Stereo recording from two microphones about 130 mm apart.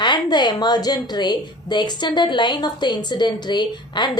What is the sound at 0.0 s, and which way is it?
A woman's voice, 35° left (ahead or behind).